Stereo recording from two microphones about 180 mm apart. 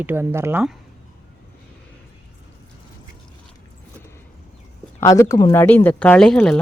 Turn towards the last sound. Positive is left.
turn(degrees=5)  # may be behind; listen again after turning